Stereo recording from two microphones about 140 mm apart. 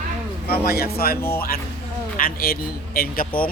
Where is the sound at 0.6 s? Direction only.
90° left.